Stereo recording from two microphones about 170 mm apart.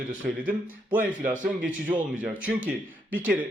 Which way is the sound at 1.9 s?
10° right (ahead or behind).